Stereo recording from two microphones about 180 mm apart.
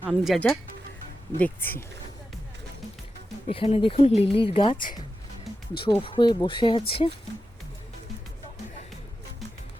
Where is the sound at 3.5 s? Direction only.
30° left (ahead or behind).